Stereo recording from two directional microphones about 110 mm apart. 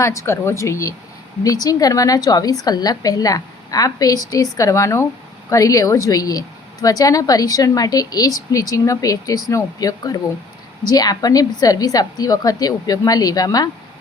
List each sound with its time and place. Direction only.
0.0 s speech: 30° left (ahead or behind)